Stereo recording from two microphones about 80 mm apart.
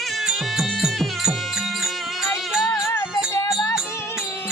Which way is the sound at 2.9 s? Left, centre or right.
Left.